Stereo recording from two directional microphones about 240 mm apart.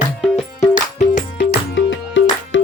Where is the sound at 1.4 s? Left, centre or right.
Left.